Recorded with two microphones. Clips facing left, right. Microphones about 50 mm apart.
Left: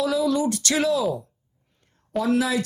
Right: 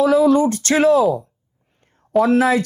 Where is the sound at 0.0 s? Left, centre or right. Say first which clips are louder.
Right 8 dB; right.